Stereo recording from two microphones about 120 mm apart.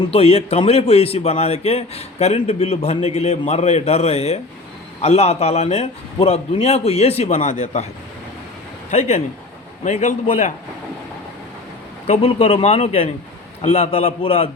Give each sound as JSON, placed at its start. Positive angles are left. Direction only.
{"t": 0.1, "sound": "a man's voice", "side_deg": 55}
{"t": 8.9, "sound": "speech", "side_deg": 70}
{"t": 9.8, "sound": "a man's voice", "side_deg": 85}
{"t": 12.0, "sound": "a man's voice", "side_deg": 65}